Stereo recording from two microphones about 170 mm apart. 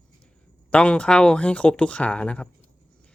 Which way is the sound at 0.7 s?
5° left (ahead or behind).